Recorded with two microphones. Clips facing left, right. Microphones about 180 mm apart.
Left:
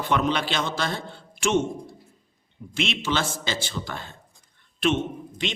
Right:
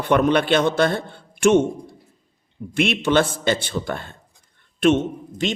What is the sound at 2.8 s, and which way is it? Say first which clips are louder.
A man's voice: right 8 dB; 55° right (ahead or behind).